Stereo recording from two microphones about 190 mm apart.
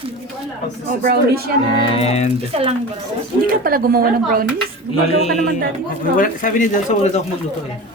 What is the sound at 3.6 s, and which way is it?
Speech, 50° right (ahead or behind).